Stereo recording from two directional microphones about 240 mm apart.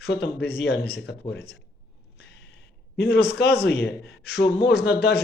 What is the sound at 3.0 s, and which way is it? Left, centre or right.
Speech, left.